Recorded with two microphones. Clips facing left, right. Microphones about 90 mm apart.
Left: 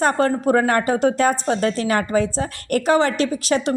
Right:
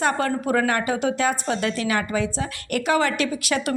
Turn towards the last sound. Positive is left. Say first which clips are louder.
# left 4 dB
turn(degrees=35)  # may be behind; listen again after turning